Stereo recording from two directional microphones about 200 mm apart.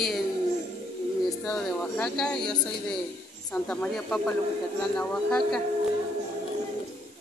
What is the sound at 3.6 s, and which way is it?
A woman's voice, 5° left (ahead or behind).